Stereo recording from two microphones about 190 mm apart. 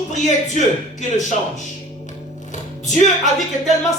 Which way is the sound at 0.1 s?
40° left (ahead or behind).